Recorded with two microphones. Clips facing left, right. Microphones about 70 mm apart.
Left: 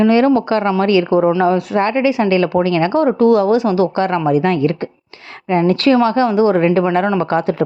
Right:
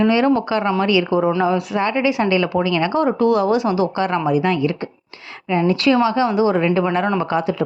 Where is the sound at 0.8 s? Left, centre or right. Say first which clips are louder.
Left 4 dB; left.